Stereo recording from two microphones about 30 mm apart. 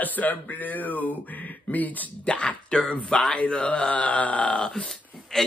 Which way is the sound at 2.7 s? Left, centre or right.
Left.